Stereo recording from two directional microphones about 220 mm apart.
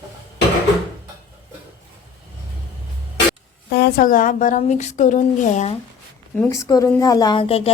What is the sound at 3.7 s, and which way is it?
Speech, 50° left (ahead or behind).